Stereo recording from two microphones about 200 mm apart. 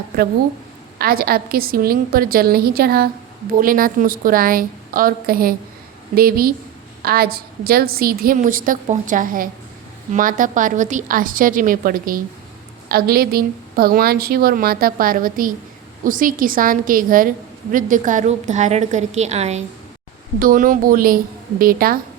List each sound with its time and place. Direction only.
0.9 s a woman's voice: 50° right (ahead or behind)